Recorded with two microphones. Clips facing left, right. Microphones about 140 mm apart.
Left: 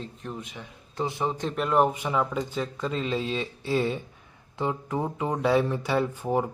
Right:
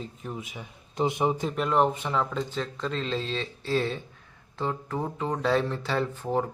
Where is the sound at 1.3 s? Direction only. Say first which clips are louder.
Left 1 dB; centre (ahead or behind).